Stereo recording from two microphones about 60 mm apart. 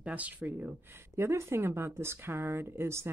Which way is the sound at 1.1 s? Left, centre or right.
Right.